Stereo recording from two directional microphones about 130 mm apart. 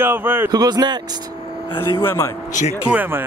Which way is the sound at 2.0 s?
15° left (ahead or behind).